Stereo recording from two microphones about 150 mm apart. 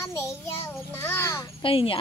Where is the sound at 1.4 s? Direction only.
35° left (ahead or behind).